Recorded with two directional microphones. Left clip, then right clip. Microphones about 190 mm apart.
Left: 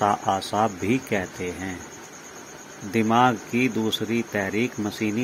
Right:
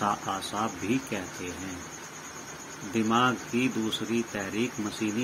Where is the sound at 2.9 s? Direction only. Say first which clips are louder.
Left 6 dB; 30° left (ahead or behind).